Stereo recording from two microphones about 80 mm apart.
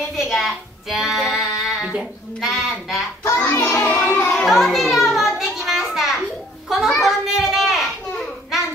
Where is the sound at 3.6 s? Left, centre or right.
Left.